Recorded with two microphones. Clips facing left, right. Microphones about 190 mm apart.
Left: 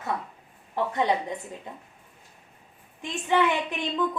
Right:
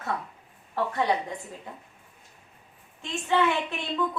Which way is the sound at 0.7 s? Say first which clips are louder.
Left 1 dB; 20° left (ahead or behind).